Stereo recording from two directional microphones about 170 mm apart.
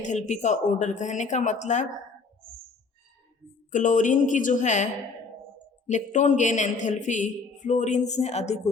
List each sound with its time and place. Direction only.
0.0 s a man's voice: 45° left (ahead or behind)
3.7 s a man's voice: 50° left (ahead or behind)